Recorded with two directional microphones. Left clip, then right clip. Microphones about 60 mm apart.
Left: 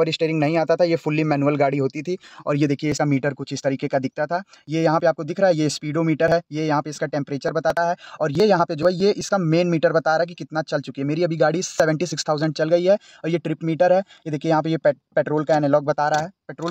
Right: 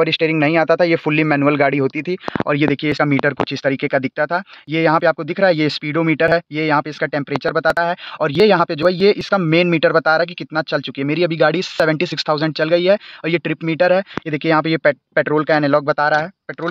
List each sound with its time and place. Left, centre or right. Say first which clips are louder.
0.0 s speech: right 5 dB; left
2.0 s speech: right 6 dB; left
14.3 s speech: right 4 dB; centre